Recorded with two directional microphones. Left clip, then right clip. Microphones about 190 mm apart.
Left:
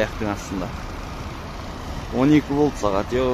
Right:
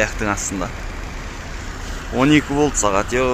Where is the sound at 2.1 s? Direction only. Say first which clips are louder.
Right 3 dB; 5° left (ahead or behind).